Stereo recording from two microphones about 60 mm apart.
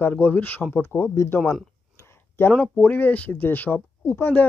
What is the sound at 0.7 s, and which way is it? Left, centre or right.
Speech, left.